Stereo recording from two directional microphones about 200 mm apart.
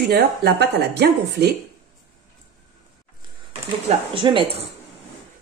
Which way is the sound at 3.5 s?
30° right (ahead or behind).